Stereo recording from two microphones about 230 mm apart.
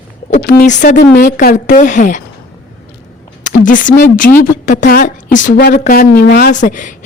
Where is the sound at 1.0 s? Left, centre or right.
Left.